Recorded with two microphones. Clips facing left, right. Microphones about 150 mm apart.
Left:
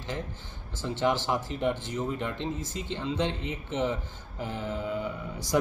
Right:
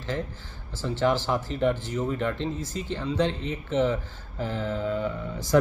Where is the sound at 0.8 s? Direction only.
20° left (ahead or behind).